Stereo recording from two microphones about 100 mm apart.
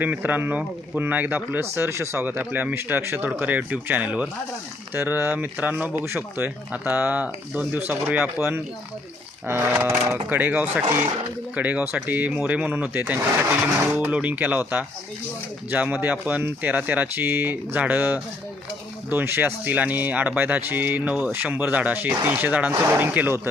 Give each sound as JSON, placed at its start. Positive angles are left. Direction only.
{"t": 0.0, "sound": "speech", "side_deg": -15}